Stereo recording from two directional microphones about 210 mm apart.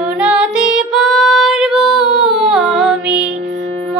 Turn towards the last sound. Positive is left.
turn(degrees=-5)  # may be behind; listen again after turning